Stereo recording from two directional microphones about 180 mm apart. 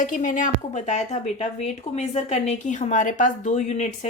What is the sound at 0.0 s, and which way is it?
Speech, 45° left (ahead or behind).